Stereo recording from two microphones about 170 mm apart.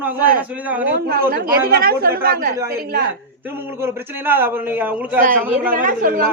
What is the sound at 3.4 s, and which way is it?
A man's voice, 15° right (ahead or behind).